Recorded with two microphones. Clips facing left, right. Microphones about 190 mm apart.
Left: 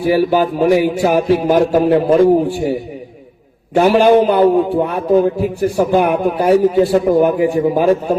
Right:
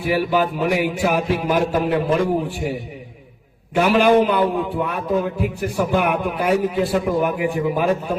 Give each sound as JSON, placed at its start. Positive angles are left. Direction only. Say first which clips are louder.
{"t": 0.0, "sound": "a man's voice", "louder": "left 6 dB", "side_deg": 35}
{"t": 3.8, "sound": "a man's voice", "louder": "left 5 dB", "side_deg": 30}